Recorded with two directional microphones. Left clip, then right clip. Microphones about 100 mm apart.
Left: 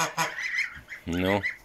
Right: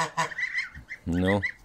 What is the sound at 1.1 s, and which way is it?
Speech, 55° right (ahead or behind).